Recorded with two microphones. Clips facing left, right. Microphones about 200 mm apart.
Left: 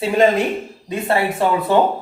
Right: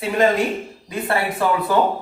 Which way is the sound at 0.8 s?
20° left (ahead or behind).